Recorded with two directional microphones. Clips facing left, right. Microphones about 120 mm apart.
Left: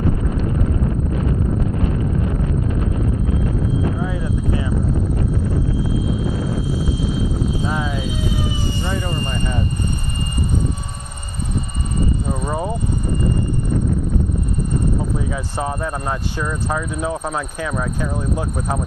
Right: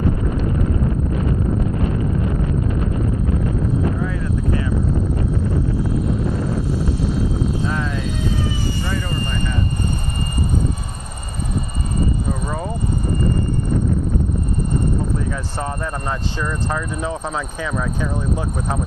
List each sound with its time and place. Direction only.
6.8 s vehicle: 5° left (ahead or behind)
12.5 s vehicle: 15° left (ahead or behind)
15.3 s speech: 5° left (ahead or behind)